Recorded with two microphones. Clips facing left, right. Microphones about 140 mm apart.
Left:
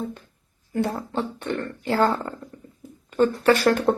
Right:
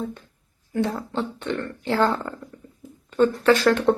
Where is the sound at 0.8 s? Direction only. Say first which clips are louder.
Even; 10° left (ahead or behind).